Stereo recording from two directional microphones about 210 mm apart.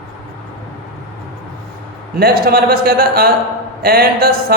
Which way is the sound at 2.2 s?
45° right (ahead or behind).